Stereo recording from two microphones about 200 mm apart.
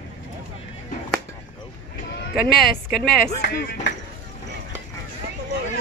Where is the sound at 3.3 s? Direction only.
55° left (ahead or behind).